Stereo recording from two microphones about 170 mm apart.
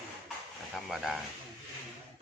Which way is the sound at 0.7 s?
Centre (ahead or behind).